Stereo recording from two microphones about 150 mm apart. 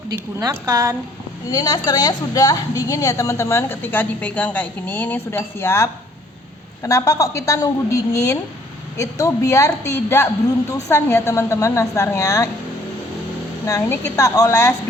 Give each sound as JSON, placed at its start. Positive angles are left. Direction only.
{"t": 0.3, "sound": "a woman's voice", "side_deg": -20}
{"t": 1.5, "sound": "a woman's voice", "side_deg": 25}
{"t": 13.7, "sound": "a woman's voice", "side_deg": 20}